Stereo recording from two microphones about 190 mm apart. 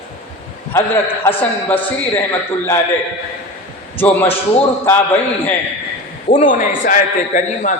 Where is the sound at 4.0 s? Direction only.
10° left (ahead or behind).